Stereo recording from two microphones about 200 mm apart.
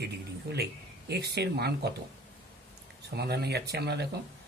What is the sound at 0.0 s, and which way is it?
Speech, 55° right (ahead or behind).